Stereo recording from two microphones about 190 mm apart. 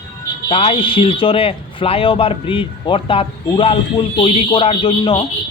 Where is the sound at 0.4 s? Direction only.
30° left (ahead or behind).